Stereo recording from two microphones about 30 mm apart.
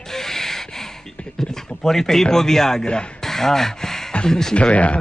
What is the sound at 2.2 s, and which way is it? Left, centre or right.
Speech, centre.